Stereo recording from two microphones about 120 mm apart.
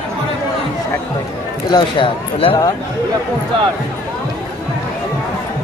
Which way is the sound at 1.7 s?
40° left (ahead or behind).